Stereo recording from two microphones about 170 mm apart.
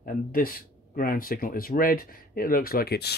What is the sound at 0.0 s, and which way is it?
Speech, 55° left (ahead or behind).